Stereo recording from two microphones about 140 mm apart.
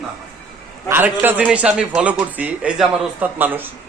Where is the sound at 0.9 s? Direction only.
15° right (ahead or behind).